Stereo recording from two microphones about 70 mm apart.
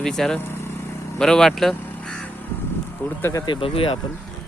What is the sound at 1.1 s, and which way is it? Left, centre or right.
Speech, centre.